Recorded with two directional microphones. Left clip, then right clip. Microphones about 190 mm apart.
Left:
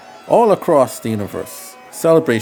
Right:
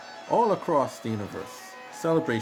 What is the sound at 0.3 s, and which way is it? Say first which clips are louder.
Speech: left 11 dB; 45° left (ahead or behind).